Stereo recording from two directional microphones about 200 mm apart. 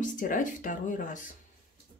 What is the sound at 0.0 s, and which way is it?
Speech, 40° left (ahead or behind).